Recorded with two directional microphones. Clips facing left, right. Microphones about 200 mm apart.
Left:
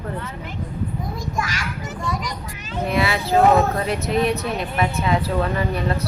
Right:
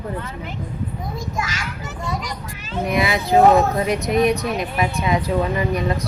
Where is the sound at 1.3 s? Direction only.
25° right (ahead or behind).